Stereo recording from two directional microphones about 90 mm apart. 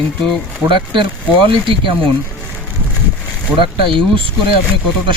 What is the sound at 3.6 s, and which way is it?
Speech, 70° right (ahead or behind).